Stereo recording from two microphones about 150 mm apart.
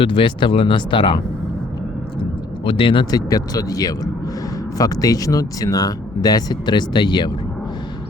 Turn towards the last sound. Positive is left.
turn(degrees=30)  # may be behind; listen again after turning